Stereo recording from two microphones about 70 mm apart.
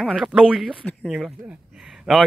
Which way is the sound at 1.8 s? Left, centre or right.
Centre.